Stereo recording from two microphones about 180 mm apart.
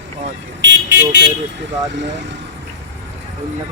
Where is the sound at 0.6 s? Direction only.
85° right.